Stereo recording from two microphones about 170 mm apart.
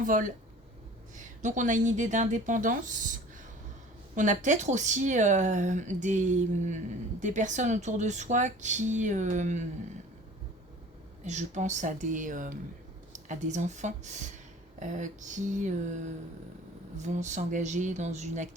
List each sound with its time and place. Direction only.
0.0 s a woman's voice: 50° right (ahead or behind)
4.1 s speech: 45° right (ahead or behind)
11.2 s speech: 45° right (ahead or behind)